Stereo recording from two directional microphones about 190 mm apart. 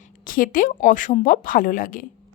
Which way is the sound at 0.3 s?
45° left (ahead or behind).